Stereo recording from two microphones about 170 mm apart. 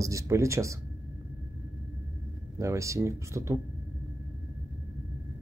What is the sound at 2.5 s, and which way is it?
Speech, 15° right (ahead or behind).